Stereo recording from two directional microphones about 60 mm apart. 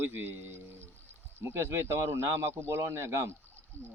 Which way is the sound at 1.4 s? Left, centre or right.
Right.